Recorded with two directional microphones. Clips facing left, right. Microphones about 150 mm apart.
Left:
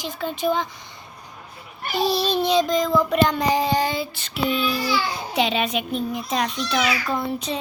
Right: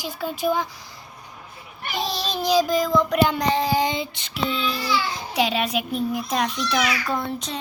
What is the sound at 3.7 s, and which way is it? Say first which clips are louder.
Speech: even; 15° right (ahead or behind).